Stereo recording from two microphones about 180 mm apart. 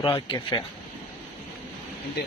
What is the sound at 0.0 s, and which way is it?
Speech, 25° left (ahead or behind).